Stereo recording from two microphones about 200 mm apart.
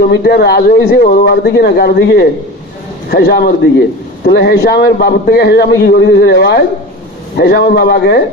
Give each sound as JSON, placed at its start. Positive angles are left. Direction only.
{"t": 0.1, "sound": "a man's voice", "side_deg": 50}